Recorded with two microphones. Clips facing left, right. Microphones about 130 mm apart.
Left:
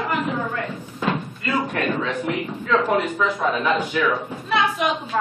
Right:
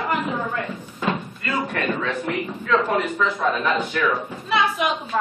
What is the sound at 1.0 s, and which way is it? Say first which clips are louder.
Door: left 1 dB; centre (ahead or behind).